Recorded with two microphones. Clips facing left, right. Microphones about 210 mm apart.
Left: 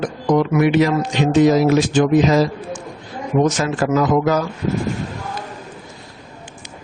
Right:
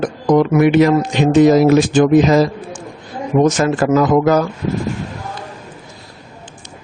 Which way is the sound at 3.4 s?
50° right (ahead or behind).